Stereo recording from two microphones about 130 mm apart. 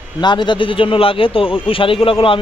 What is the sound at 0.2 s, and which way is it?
A man's voice, 35° left (ahead or behind).